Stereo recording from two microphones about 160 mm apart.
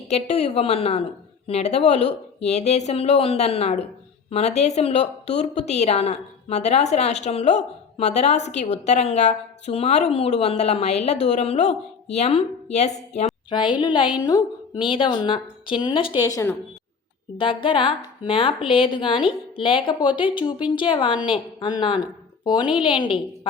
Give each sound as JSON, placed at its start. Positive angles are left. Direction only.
{"t": 0.1, "sound": "a woman's voice", "side_deg": 45}
{"t": 13.5, "sound": "a woman's voice", "side_deg": 30}
{"t": 16.2, "sound": "a woman's voice", "side_deg": 20}
{"t": 17.3, "sound": "a woman's voice", "side_deg": 35}